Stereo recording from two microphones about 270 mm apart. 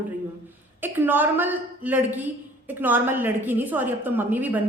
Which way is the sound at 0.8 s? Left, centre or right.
Centre.